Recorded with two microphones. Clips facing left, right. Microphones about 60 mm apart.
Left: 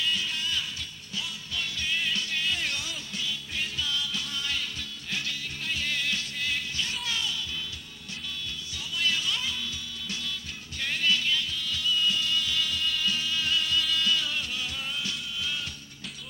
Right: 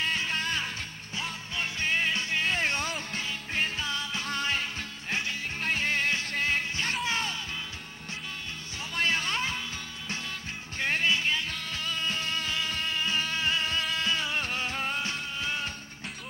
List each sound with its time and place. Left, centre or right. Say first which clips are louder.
0.0 s music: right 1 dB; right
8.9 s music: right 2 dB; right
10.8 s music: right 1 dB; right
11.5 s music: left 4 dB; right